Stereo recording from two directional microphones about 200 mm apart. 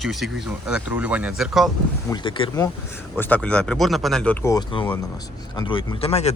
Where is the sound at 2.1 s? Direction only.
25° left (ahead or behind).